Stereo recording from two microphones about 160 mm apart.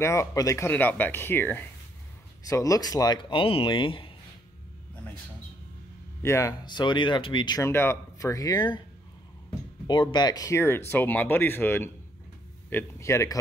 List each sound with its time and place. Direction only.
0.0 s speech: 15° left (ahead or behind); by 4.1 s 35° left (ahead or behind)
6.2 s speech: 20° left (ahead or behind)
9.8 s speech: 25° left (ahead or behind)